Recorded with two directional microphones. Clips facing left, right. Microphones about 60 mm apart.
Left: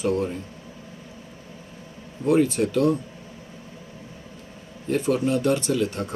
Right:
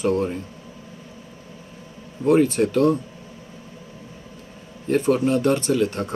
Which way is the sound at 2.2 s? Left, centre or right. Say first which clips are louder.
Right 3 dB; right.